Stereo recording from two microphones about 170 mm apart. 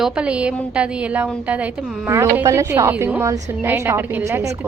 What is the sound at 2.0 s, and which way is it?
A woman's voice, 15° right (ahead or behind).